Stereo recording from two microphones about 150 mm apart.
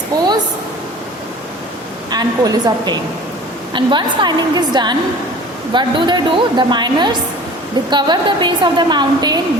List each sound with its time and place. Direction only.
0.1 s speech: 25° right (ahead or behind)
2.0 s a woman's voice: 25° right (ahead or behind)